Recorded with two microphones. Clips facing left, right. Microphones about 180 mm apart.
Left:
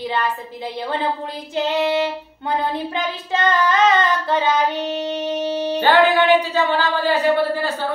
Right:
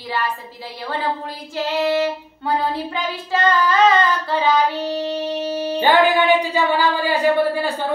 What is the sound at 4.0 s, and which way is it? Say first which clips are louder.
Child singing: even; 20° left (ahead or behind).